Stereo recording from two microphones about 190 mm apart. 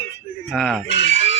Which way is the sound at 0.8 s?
70° left (ahead or behind).